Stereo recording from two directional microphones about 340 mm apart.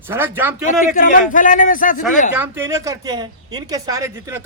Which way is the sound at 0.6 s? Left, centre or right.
Left.